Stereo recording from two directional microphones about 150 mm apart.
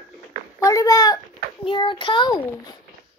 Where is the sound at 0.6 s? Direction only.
25° left (ahead or behind).